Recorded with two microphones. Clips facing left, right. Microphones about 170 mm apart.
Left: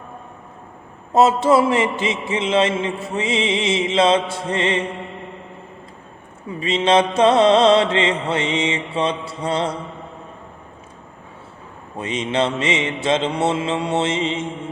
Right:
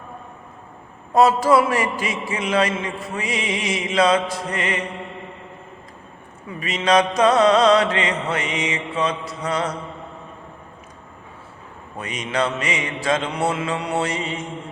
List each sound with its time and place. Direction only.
1.1 s mantra: 25° left (ahead or behind)
6.6 s mantra: 30° left (ahead or behind)
11.9 s mantra: 25° left (ahead or behind)